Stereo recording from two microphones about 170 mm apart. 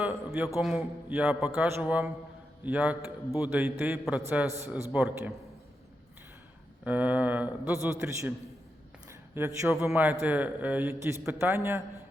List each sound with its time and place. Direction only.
0.0 s a man's voice: 10° right (ahead or behind)
6.8 s a man's voice: 10° right (ahead or behind)
9.0 s a sound: 15° right (ahead or behind)
9.6 s a man's voice: 10° right (ahead or behind)